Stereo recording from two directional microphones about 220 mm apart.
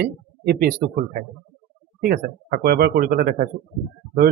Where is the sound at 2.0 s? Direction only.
50° right (ahead or behind).